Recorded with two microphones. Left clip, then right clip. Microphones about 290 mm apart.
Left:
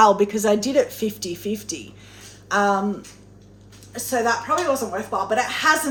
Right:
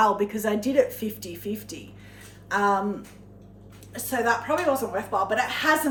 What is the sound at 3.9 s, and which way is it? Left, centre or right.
A woman's voice, centre.